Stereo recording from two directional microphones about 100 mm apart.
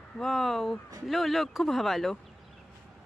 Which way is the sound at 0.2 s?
Centre (ahead or behind).